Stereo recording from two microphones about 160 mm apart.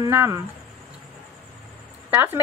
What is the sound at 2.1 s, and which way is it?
Speech, 10° right (ahead or behind).